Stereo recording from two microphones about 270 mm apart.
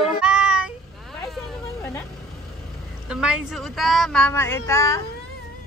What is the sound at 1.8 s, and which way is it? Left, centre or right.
Vehicle, centre.